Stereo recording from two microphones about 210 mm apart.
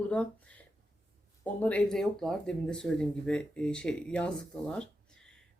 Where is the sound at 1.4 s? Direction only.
5° left (ahead or behind).